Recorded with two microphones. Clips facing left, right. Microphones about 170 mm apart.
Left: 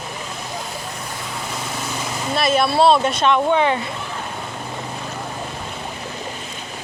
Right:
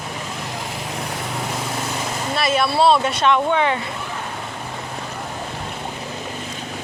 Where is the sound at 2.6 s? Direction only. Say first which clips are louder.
Left 1 dB; 20° left (ahead or behind).